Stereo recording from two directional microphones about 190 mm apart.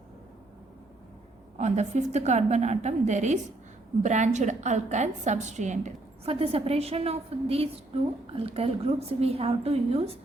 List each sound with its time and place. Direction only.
1.5 s a woman's voice: 35° right (ahead or behind)